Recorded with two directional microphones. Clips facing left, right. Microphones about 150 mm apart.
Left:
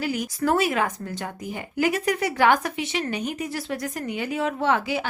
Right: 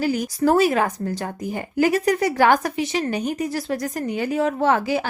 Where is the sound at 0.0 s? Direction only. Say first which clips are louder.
Right 5 dB; 35° right (ahead or behind).